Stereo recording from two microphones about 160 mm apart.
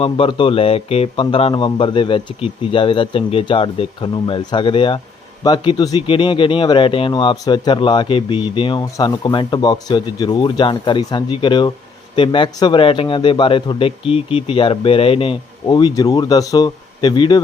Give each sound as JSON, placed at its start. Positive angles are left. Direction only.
{"t": 0.0, "sound": "a man's voice", "side_deg": 30}